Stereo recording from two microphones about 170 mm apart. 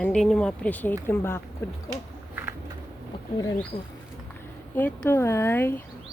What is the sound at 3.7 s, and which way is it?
Speech, 35° left (ahead or behind).